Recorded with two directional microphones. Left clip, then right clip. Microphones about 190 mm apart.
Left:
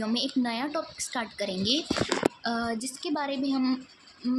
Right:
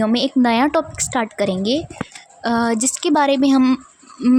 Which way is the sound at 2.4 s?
65° right (ahead or behind).